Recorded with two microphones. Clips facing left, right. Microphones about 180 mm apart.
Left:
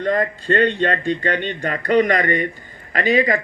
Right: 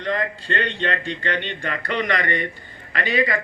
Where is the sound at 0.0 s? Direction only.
45° left (ahead or behind).